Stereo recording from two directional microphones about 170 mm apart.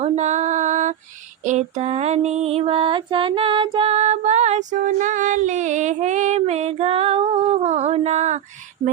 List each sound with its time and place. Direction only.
0.0 s female singing: 45° right (ahead or behind)
1.5 s music: 40° right (ahead or behind)